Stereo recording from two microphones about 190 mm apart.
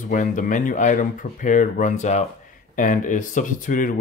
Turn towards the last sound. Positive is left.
turn(degrees=45)  # may be behind; listen again after turning